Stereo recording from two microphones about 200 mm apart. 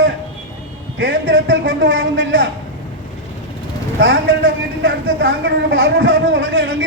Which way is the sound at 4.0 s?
70° right (ahead or behind).